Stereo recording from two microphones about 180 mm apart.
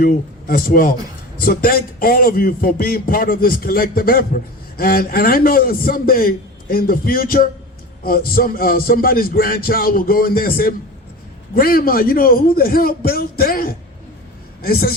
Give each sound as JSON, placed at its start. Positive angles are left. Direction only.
{"t": 0.0, "sound": "a man's voice", "side_deg": 55}